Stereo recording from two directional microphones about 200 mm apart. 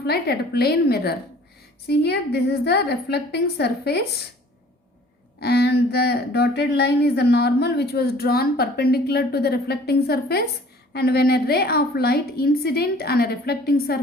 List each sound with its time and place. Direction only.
0.0 s a woman's voice: 55° left (ahead or behind)
5.4 s speech: 55° left (ahead or behind)